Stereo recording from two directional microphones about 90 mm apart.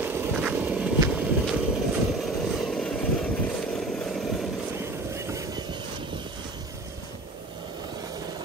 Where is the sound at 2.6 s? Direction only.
10° left (ahead or behind).